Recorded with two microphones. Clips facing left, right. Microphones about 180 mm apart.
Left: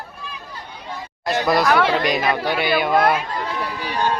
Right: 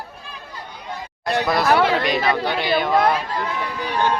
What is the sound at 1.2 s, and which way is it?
Speech, centre (ahead or behind).